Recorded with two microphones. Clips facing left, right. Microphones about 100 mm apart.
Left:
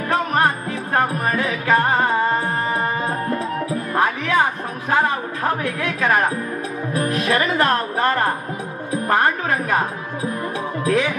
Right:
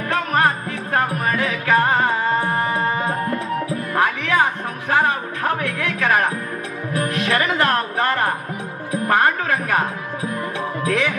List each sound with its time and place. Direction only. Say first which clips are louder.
0.1 s music: even; 30° left (ahead or behind)
3.9 s music: even; 30° left (ahead or behind)